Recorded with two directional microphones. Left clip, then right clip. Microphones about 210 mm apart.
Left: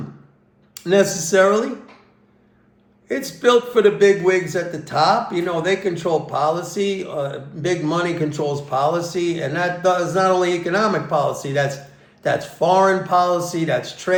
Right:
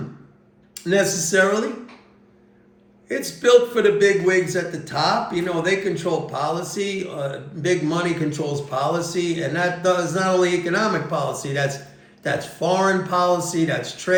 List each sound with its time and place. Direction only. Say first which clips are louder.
0.7 s a man's voice: left 3 dB; 15° left (ahead or behind)
3.1 s a man's voice: right 1 dB; 15° left (ahead or behind)